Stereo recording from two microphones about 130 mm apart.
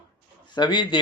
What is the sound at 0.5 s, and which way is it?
Speech, 35° left (ahead or behind).